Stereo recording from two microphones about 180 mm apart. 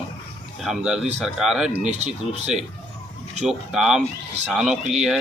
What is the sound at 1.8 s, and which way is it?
Speech, 40° right (ahead or behind).